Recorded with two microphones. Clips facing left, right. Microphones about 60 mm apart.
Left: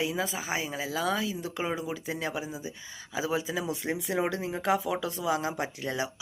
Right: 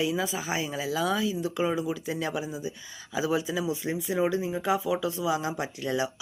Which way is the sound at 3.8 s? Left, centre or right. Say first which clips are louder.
Right 1 dB; left.